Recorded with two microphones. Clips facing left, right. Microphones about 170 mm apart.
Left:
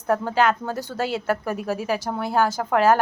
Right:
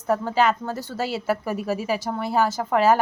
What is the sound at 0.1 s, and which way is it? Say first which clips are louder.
A woman's voice: even; 5° right (ahead or behind).